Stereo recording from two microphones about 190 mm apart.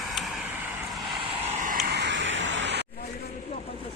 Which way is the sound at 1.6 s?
50° right (ahead or behind).